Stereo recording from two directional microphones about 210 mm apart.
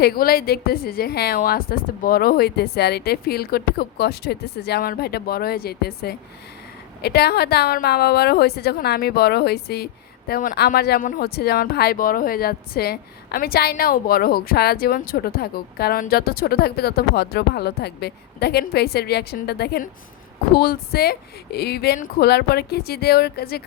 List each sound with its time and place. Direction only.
0.0 s a woman's voice: 45° left (ahead or behind)